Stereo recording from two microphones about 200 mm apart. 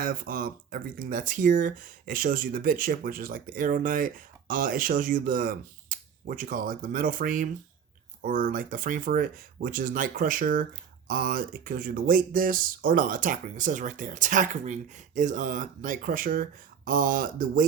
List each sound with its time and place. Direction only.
0.0 s speech: 45° right (ahead or behind)